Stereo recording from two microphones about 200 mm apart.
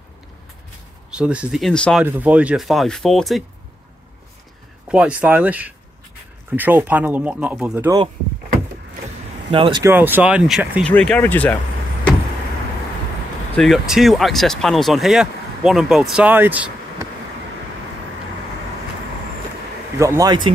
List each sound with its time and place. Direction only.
1.1 s speech: 5° right (ahead or behind)
2.0 s speech: 10° right (ahead or behind)
4.8 s speech: 5° right (ahead or behind)
9.5 s speech: 25° right (ahead or behind)
9.8 s speech: 10° right (ahead or behind); by 11.6 s 10° left (ahead or behind)
13.6 s speech: centre (ahead or behind)
20.0 s speech: 15° right (ahead or behind)